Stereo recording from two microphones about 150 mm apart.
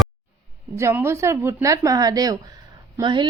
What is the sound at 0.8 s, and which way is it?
Speech, 15° right (ahead or behind).